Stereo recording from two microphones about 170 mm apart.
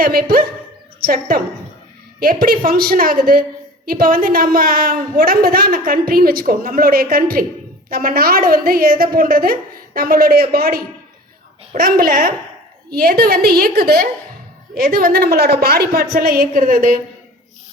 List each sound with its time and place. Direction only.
0.0 s a woman's voice: 60° right (ahead or behind)